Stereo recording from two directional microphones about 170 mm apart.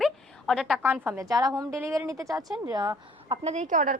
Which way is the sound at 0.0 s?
Centre (ahead or behind).